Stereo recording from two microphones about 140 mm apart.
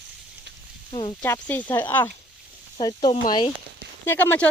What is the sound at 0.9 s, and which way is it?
Speech, 35° left (ahead or behind).